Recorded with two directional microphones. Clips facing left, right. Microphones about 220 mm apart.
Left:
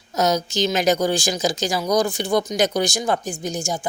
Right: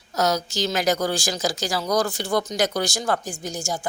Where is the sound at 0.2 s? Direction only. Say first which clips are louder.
Left 3 dB; 20° left (ahead or behind).